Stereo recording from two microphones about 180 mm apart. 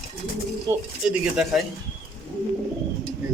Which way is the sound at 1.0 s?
5° right (ahead or behind).